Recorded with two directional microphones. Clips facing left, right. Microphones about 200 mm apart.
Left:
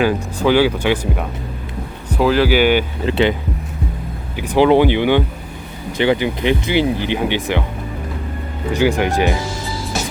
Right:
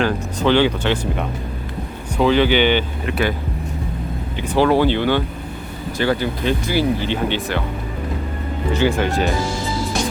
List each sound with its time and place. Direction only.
0.0 s speech: 10° left (ahead or behind)
3.1 s speech: 25° left (ahead or behind)
4.4 s speech: 15° left (ahead or behind)
8.7 s speech: 10° left (ahead or behind)